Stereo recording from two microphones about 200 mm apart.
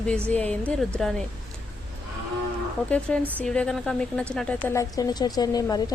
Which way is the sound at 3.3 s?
5° left (ahead or behind).